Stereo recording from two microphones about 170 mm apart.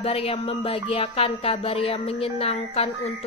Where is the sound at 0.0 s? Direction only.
35° left (ahead or behind).